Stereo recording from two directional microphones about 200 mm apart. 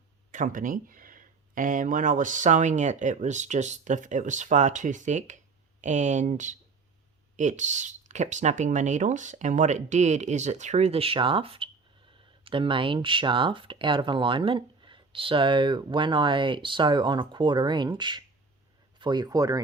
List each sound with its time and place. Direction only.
0.3 s speech: 40° right (ahead or behind); by 19.5 s 20° right (ahead or behind)